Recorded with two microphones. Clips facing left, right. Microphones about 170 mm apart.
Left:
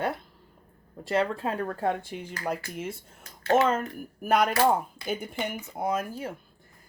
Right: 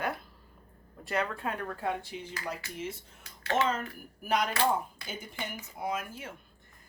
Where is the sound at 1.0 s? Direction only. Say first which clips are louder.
Left 6 dB; 30° left (ahead or behind).